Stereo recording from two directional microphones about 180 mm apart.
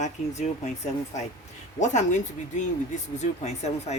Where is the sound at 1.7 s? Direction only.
40° left (ahead or behind).